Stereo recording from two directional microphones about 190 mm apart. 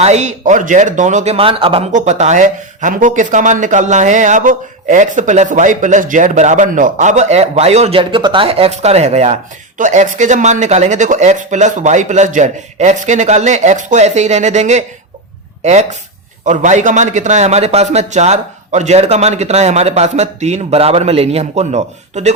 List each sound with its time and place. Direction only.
0.0 s speech: 35° right (ahead or behind)